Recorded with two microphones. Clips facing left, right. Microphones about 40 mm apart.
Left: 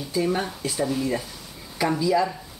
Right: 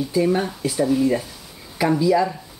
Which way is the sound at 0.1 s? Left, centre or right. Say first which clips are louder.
Right 3 dB; centre.